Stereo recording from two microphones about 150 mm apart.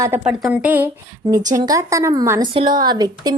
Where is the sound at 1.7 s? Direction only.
20° right (ahead or behind).